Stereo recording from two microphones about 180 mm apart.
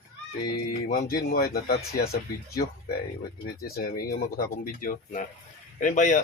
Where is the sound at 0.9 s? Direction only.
50° left (ahead or behind).